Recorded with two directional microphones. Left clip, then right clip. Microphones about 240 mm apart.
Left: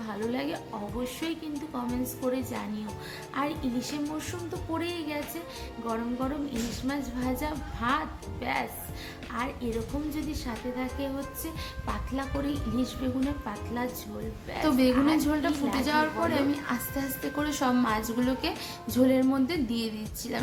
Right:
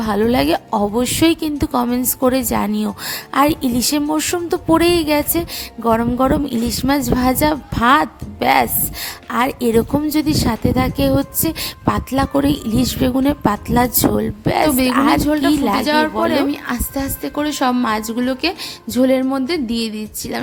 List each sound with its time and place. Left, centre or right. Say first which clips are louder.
0.0 s a woman's voice: right 17 dB; right